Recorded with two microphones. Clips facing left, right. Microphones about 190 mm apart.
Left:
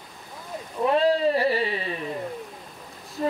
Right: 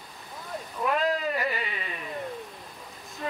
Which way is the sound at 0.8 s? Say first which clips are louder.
Left 7 dB; 30° left (ahead or behind).